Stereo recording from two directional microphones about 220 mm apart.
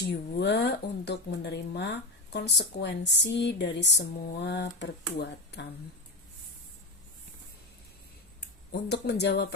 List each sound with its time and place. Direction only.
0.0 s speech: 50° left (ahead or behind)
8.7 s speech: 50° left (ahead or behind)